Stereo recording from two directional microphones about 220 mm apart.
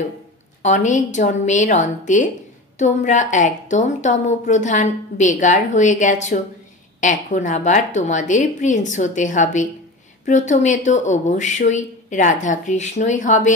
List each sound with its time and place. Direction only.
0.6 s a woman's voice: 35° left (ahead or behind)